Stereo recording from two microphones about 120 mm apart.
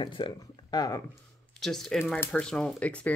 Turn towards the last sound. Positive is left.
turn(degrees=10)  # may be behind; listen again after turning